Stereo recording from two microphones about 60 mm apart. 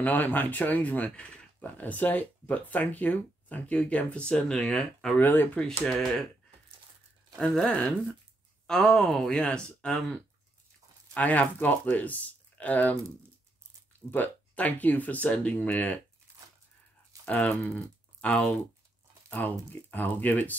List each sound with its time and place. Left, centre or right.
0.0 s speech: left
1.8 s speech: left; by 5.1 s centre
5.2 s speech: left
5.7 s speech: centre
7.3 s speech: centre
11.1 s speech: left
14.1 s speech: left
17.2 s speech: left